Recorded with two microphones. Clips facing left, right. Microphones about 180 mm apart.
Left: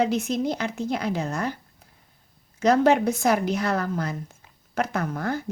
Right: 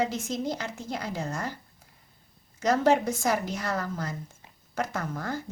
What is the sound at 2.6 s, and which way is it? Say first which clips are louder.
A woman's voice: left 4 dB; 65° left (ahead or behind).